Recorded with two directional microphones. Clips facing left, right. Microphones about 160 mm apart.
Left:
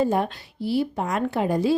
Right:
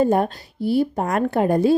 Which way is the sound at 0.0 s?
50° right (ahead or behind).